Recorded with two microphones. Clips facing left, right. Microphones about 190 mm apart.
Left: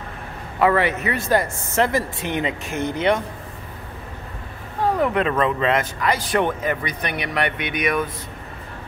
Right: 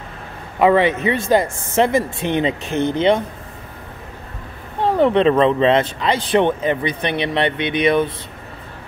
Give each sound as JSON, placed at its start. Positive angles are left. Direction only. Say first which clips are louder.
{"t": 0.6, "sound": "speech", "louder": "right 4 dB", "side_deg": -20}
{"t": 4.7, "sound": "a sound", "louder": "right 5 dB", "side_deg": -25}
{"t": 5.4, "sound": "speech", "louder": "right 6 dB", "side_deg": -25}